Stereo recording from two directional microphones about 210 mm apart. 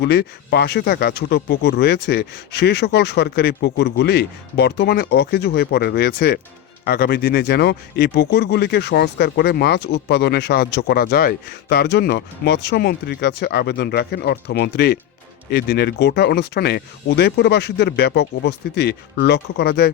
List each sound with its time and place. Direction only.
0.0 s speech: 50° left (ahead or behind)